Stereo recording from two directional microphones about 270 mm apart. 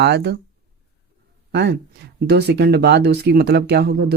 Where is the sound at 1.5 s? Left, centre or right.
Right.